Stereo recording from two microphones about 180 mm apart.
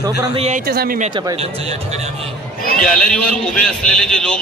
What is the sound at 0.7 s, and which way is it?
Speech, 55° right (ahead or behind).